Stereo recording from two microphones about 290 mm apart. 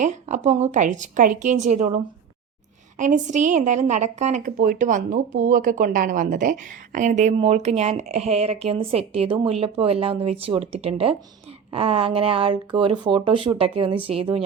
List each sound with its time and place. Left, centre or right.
0.0 s speech: right
3.0 s speech: right